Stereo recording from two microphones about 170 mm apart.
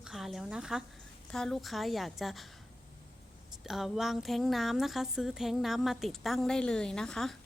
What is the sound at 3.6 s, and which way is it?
A woman's voice, centre (ahead or behind).